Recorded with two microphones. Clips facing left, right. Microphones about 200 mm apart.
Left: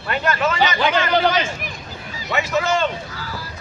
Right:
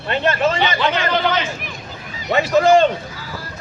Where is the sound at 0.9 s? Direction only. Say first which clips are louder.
Left 2 dB; 35° left (ahead or behind).